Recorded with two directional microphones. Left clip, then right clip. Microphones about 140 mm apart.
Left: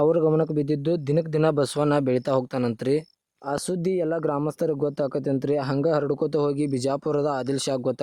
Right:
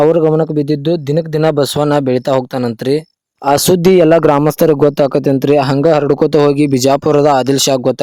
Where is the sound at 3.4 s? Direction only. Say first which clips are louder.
Right 17 dB; 80° right.